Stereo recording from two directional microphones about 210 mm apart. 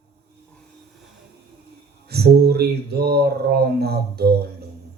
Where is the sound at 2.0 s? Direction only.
50° right (ahead or behind).